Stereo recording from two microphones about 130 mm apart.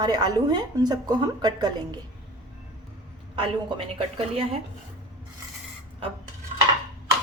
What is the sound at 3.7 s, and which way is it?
Speech, 50° right (ahead or behind).